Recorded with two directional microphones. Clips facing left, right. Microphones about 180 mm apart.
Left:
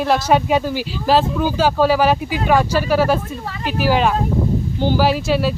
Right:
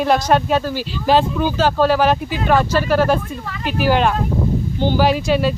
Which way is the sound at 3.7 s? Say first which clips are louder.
Even; centre (ahead or behind).